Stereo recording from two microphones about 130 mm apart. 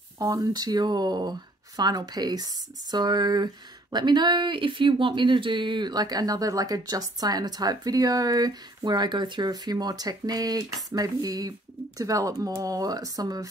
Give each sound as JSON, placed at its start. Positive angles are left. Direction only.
{"t": 0.2, "sound": "speech", "side_deg": -30}